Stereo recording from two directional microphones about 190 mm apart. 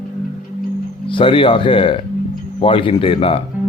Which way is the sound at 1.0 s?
25° left (ahead or behind).